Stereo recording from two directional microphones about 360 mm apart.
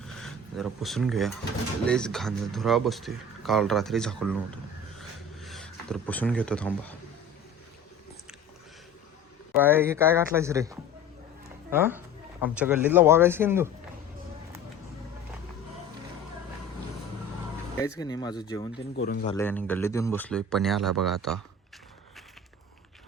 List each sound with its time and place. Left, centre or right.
0.2 s speech: centre
4.9 s a sound: centre
9.6 s speech: centre
17.7 s speech: centre
18.9 s speech: left
19.3 s speech: centre